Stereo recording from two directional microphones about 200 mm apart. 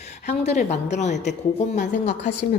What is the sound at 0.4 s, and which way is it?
Speech, 35° left (ahead or behind).